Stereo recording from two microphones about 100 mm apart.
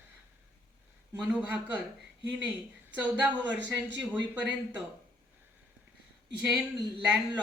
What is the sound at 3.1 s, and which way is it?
A man's voice, 15° right (ahead or behind).